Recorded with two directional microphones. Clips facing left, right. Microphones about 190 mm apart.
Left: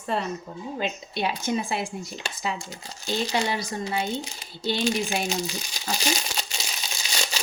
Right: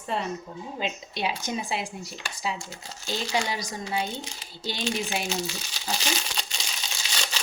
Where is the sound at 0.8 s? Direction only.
15° right (ahead or behind).